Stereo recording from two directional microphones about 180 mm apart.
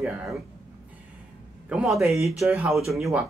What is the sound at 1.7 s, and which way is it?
Speech, 5° right (ahead or behind).